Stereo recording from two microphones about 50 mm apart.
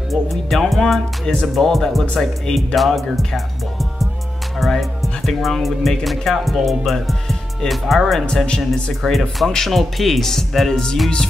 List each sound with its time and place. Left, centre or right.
0.1 s music: centre
1.2 s speech: centre
1.5 s music: centre
4.6 s music: centre